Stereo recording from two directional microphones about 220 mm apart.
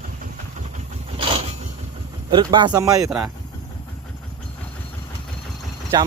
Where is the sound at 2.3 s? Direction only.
20° right (ahead or behind).